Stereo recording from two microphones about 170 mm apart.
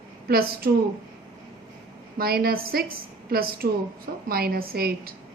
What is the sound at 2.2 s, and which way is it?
A woman's voice, 65° right (ahead or behind).